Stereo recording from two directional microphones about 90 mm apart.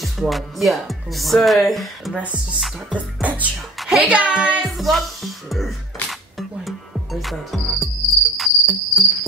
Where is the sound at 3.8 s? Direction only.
15° right (ahead or behind).